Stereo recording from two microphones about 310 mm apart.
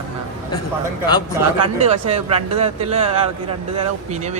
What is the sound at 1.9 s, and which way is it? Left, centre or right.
Speech, centre.